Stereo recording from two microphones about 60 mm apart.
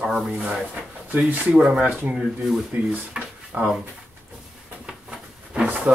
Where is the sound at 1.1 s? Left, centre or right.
Right.